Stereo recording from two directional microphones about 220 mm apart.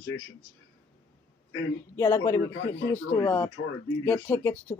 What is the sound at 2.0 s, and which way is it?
Speech, 15° left (ahead or behind).